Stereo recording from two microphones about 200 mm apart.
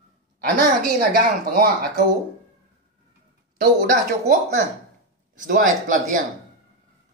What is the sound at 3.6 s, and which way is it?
A woman's voice, 40° right (ahead or behind).